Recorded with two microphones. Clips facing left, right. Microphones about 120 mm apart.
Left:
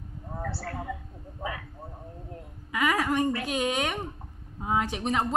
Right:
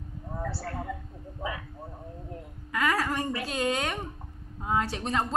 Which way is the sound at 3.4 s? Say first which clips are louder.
Left 1 dB; 15° left (ahead or behind).